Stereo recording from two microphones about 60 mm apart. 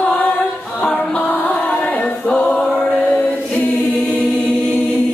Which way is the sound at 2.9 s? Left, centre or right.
Left.